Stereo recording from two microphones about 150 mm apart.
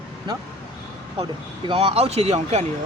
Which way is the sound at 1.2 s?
35° right (ahead or behind).